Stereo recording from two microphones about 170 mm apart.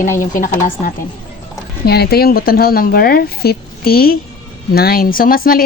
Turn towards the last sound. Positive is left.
turn(degrees=60)  # may be behind; listen again after turning